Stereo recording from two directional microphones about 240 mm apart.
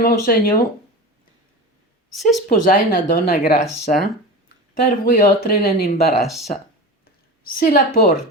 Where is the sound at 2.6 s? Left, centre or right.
Left.